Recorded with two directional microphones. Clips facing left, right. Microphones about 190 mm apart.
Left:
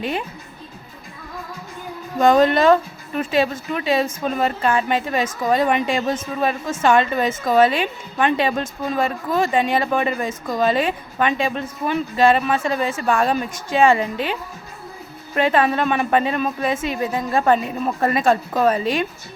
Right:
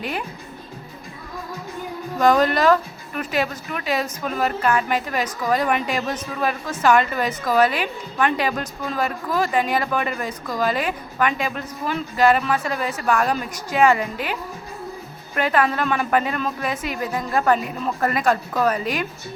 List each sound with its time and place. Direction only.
0.0 s a woman's voice: 25° left (ahead or behind)
2.1 s a woman's voice: 25° left (ahead or behind)
15.4 s a woman's voice: 25° left (ahead or behind)